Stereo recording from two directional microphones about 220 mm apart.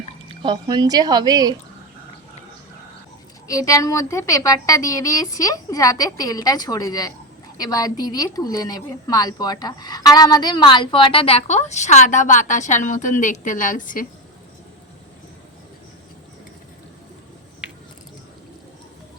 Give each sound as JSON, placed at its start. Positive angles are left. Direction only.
{"t": 0.3, "sound": "speech", "side_deg": -20}
{"t": 3.4, "sound": "a woman's voice", "side_deg": 15}